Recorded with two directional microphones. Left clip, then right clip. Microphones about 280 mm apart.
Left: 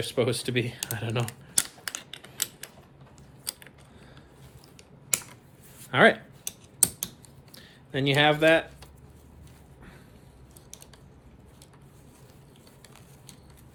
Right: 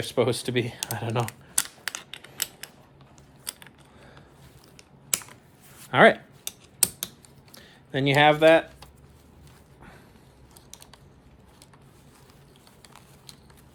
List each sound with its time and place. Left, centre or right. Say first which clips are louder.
0.0 s speech: right 2 dB; right
1.5 s a sound: even; centre
3.5 s a sound: left 2 dB; centre
5.9 s speech: right 3 dB; right
6.4 s typing: right 1 dB; centre
7.5 s speech: right 2 dB; right